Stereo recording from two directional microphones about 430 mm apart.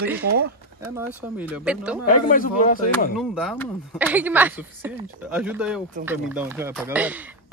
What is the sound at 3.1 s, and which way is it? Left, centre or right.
A woman's voice, centre.